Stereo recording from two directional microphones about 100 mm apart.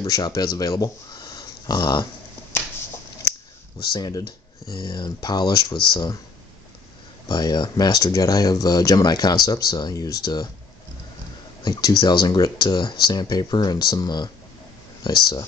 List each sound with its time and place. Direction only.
0.0 s speech: 35° left (ahead or behind)
3.9 s speech: 45° left (ahead or behind)
7.2 s speech: 45° left (ahead or behind)
11.6 s speech: 35° left (ahead or behind)